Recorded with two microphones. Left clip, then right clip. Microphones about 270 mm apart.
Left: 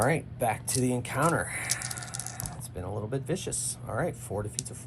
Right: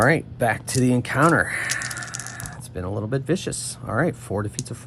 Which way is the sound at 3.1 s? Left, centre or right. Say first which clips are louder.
Right 9 dB; right.